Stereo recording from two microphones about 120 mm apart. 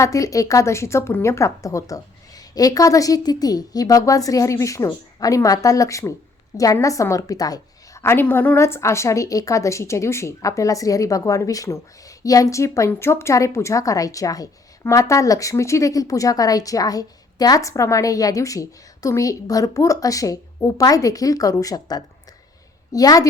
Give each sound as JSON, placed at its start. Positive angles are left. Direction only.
{"t": 0.0, "sound": "a woman's voice", "side_deg": 25}